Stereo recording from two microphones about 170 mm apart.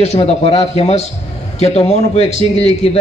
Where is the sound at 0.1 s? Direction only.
35° left (ahead or behind).